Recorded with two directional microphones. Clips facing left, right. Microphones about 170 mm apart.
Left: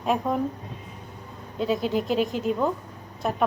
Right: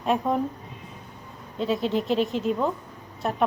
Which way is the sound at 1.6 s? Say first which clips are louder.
Even; 5° left (ahead or behind).